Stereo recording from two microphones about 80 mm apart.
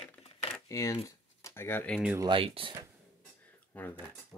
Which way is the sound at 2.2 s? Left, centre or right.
Right.